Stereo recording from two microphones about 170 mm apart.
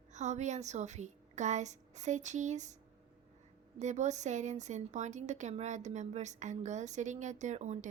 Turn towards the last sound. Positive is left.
turn(degrees=-45)  # may be behind; listen again after turning